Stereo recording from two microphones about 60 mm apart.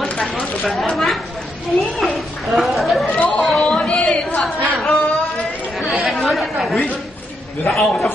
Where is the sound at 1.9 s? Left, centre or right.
Centre.